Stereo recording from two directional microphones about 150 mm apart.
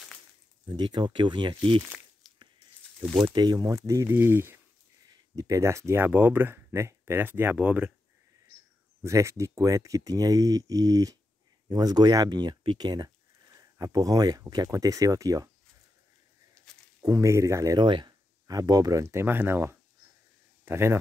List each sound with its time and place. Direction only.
0.7 s speech: 30° right (ahead or behind)
3.3 s speech: 30° right (ahead or behind)
5.0 s speech: 25° right (ahead or behind)
9.0 s speech: 20° right (ahead or behind)
17.0 s speech: 20° right (ahead or behind)